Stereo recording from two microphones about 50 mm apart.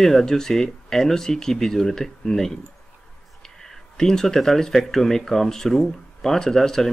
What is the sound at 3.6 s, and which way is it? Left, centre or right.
Speech, centre.